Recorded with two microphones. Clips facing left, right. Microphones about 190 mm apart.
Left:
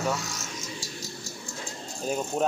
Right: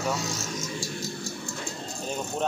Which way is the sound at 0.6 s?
55° right (ahead or behind).